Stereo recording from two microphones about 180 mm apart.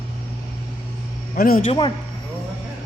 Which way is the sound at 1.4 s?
55° left (ahead or behind).